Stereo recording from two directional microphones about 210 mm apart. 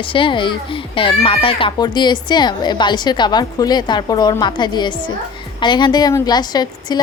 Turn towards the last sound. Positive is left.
turn(degrees=20)  # may be behind; listen again after turning